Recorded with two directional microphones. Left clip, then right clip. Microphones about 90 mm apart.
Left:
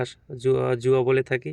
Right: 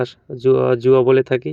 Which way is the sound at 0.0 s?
20° right (ahead or behind).